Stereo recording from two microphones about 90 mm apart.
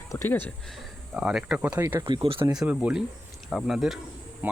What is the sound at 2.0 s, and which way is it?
Speech, 75° right (ahead or behind).